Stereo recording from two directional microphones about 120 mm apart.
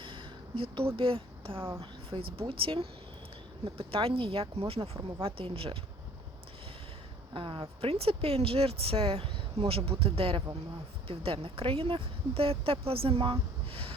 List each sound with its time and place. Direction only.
0.0 s a sound: 45° right (ahead or behind)
0.9 s speech: 50° right (ahead or behind)
1.5 s speech: 20° right (ahead or behind)
1.8 s speech: 50° right (ahead or behind)
4.8 s speech: 25° right (ahead or behind)
5.2 s speech: 50° right (ahead or behind)
7.3 s a woman's voice: 40° right (ahead or behind)
7.8 s speech: 55° right (ahead or behind)
13.7 s sniff: 50° right (ahead or behind)